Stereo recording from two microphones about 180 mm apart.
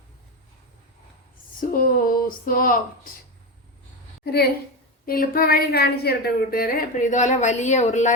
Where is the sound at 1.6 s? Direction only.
50° left (ahead or behind).